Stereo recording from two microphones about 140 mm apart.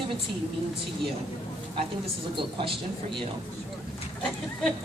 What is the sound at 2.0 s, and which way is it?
Speech, 40° right (ahead or behind).